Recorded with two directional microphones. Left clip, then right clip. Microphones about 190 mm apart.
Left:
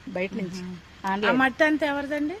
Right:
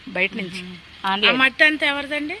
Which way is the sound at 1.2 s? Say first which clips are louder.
Right 6 dB; 35° left (ahead or behind).